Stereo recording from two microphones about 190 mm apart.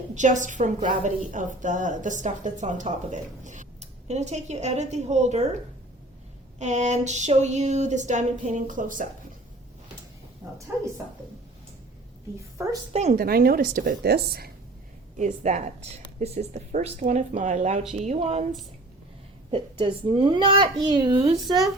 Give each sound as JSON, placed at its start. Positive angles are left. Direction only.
{"t": 0.1, "sound": "a woman's voice", "side_deg": -40}
{"t": 6.6, "sound": "a woman's voice", "side_deg": -35}
{"t": 10.7, "sound": "speech", "side_deg": -10}
{"t": 12.9, "sound": "a woman's voice", "side_deg": -35}
{"t": 13.1, "sound": "a woman's voice", "side_deg": -50}
{"t": 15.2, "sound": "a woman's voice", "side_deg": -35}
{"t": 19.5, "sound": "a child's voice", "side_deg": -25}